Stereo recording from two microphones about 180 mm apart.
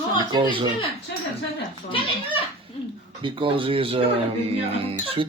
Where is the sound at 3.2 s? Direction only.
30° right (ahead or behind).